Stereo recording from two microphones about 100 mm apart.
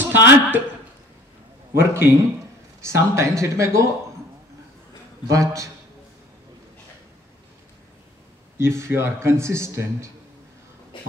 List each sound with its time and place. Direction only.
0.0 s a man's voice: 20° right (ahead or behind)
1.8 s a man's voice: 25° right (ahead or behind)
5.3 s speech: 30° right (ahead or behind)
8.5 s a man's voice: 25° right (ahead or behind)